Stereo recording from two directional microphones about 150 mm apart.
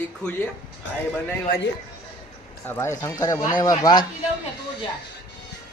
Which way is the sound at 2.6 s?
15° left (ahead or behind).